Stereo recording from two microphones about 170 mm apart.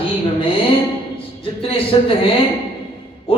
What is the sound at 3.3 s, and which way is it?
Music, 35° left (ahead or behind).